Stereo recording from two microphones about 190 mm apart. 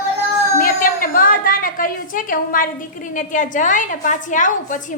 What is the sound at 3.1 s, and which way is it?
A woman's voice, 40° left (ahead or behind).